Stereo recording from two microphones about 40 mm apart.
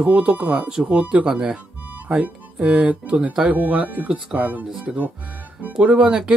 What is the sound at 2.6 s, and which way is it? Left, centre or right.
Speech, right.